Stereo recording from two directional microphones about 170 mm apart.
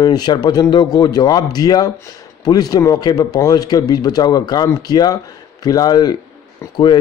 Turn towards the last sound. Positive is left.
turn(degrees=25)  # may be behind; listen again after turning